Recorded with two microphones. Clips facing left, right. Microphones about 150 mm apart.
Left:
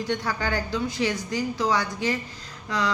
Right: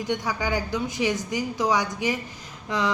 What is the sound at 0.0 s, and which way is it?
A woman's voice, 15° right (ahead or behind).